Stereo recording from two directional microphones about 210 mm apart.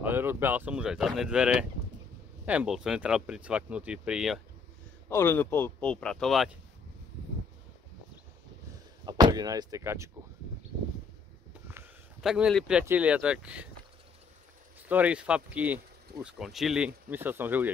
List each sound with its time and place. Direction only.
0.0 s speech: 10° right (ahead or behind)
5.1 s speech: 10° left (ahead or behind)
9.0 s speech: 20° right (ahead or behind)
11.6 s speech: 5° right (ahead or behind)
14.8 s speech: 10° right (ahead or behind)